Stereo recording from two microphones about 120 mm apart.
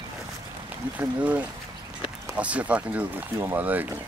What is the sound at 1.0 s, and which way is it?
Speech, 10° right (ahead or behind).